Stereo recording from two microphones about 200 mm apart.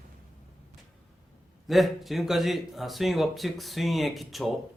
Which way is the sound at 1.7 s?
Centre (ahead or behind).